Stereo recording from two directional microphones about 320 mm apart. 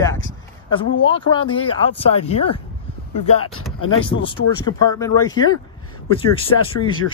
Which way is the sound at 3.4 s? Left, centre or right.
Left.